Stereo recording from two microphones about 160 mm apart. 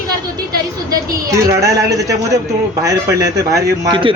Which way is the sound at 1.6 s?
20° right (ahead or behind).